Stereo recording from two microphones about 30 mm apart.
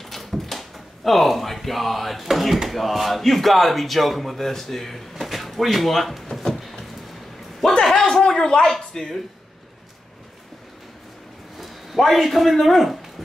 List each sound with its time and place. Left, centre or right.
0.0 s a sound: centre
2.2 s speech: centre
4.4 s speech: centre
7.9 s a sound: centre
8.7 s speech: centre
11.5 s a man's voice: centre